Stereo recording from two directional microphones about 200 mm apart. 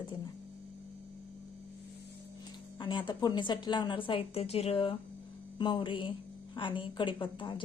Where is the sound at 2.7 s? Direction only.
25° left (ahead or behind).